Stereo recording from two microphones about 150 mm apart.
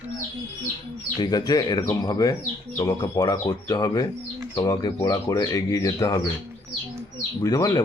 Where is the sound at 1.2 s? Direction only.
30° left (ahead or behind).